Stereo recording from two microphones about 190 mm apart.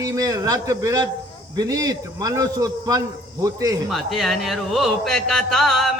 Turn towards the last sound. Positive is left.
turn(degrees=0)  # may be behind; listen again after turning